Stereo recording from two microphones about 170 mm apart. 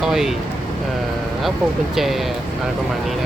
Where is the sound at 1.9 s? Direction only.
Centre (ahead or behind).